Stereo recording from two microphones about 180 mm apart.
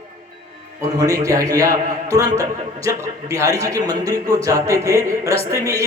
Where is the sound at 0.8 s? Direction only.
20° right (ahead or behind).